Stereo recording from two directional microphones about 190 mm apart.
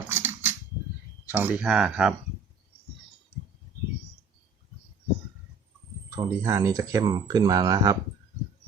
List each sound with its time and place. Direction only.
0.1 s a sound: 10° right (ahead or behind)
1.3 s speech: 5° right (ahead or behind)
6.1 s speech: 15° right (ahead or behind)